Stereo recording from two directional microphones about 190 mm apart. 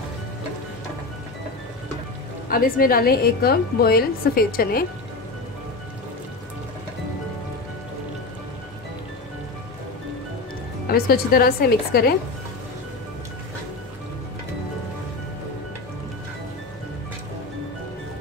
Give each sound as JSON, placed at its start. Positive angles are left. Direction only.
{"t": 2.5, "sound": "a woman's voice", "side_deg": 50}
{"t": 10.9, "sound": "a woman's voice", "side_deg": 50}